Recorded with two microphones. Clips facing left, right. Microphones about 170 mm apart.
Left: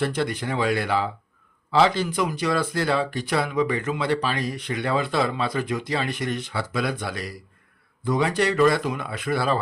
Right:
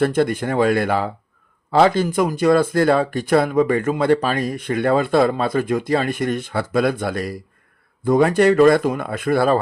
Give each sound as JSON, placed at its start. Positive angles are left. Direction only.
{"t": 0.0, "sound": "speech", "side_deg": -50}